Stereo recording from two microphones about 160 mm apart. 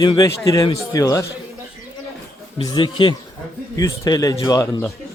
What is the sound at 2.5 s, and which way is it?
Speech, 30° left (ahead or behind).